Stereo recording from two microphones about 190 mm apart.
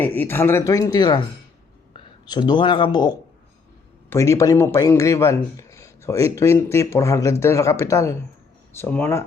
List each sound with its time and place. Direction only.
0.0 s speech: 10° left (ahead or behind)